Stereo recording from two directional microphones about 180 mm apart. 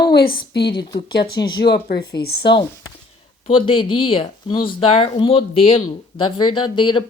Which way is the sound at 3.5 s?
30° left (ahead or behind).